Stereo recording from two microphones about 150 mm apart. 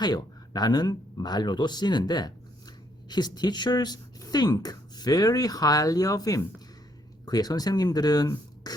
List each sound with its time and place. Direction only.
0.0 s speech: 25° left (ahead or behind)